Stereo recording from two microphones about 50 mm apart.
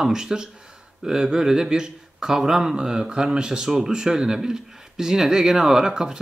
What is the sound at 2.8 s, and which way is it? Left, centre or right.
Speech, centre.